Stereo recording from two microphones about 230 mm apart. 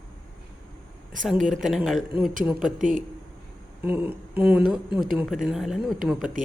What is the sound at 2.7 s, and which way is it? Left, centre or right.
Speech, right.